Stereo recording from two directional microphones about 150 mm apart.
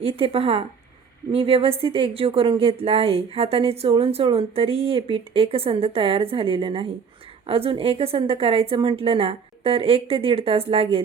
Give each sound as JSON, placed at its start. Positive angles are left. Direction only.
{"t": 0.0, "sound": "a woman's voice", "side_deg": -40}